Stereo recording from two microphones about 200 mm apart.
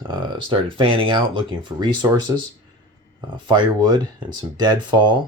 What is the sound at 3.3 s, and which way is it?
Speech, 20° right (ahead or behind).